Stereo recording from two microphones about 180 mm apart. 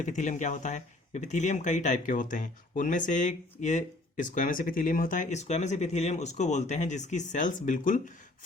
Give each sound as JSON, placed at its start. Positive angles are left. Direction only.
{"t": 0.0, "sound": "speech", "side_deg": 40}